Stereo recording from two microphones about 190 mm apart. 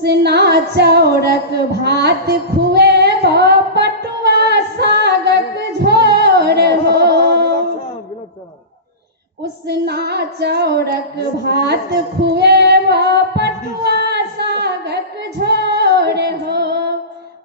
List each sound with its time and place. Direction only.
0.0 s female singing: 60° right (ahead or behind)
1.3 s a sound: 60° right (ahead or behind)
9.4 s music: 60° right (ahead or behind)